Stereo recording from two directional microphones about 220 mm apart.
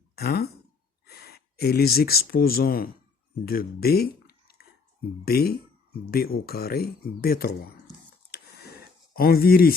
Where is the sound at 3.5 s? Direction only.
45° left (ahead or behind).